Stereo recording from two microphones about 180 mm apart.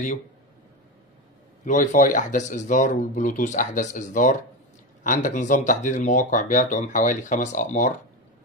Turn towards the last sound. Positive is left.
turn(degrees=45)  # may be behind; listen again after turning